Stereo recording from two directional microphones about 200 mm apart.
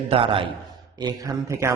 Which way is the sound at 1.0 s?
15° right (ahead or behind).